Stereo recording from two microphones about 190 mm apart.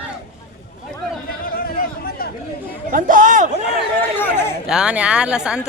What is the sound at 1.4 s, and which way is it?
Chatter, 55° left (ahead or behind).